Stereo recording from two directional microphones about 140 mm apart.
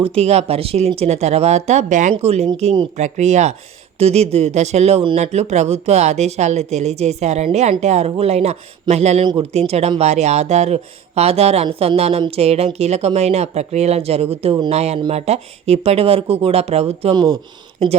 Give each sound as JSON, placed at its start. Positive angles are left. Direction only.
{"t": 0.0, "sound": "speech", "side_deg": -45}